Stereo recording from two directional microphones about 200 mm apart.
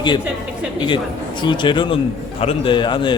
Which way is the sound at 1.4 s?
25° left (ahead or behind).